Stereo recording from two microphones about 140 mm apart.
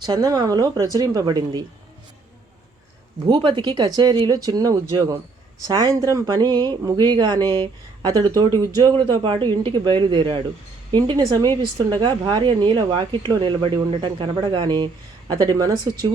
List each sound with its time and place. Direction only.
0.0 s speech: 30° right (ahead or behind)
3.2 s a woman's voice: 35° right (ahead or behind)